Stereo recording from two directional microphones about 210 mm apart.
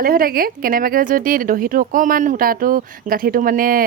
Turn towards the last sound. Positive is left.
turn(degrees=-40)  # may be behind; listen again after turning